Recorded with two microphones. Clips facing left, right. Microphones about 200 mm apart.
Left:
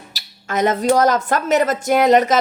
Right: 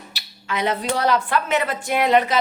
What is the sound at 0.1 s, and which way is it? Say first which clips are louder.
Speech: left 4 dB; 45° left (ahead or behind).